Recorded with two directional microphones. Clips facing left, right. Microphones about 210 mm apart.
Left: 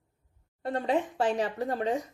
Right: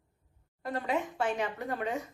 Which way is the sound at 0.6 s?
30° left (ahead or behind).